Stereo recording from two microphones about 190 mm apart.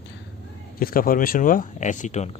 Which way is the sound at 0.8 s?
50° left (ahead or behind).